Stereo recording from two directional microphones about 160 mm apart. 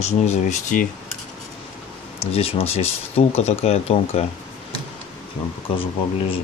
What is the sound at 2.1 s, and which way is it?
Speech, 35° left (ahead or behind).